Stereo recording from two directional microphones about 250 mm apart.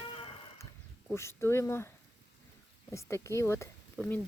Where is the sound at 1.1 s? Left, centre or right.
Centre.